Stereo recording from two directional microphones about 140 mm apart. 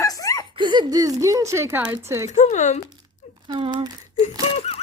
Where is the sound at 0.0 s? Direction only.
25° left (ahead or behind).